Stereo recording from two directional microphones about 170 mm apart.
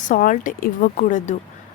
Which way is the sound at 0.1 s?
50° left (ahead or behind).